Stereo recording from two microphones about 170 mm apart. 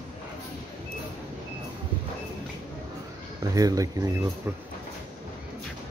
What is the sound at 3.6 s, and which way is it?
Speech, 20° right (ahead or behind).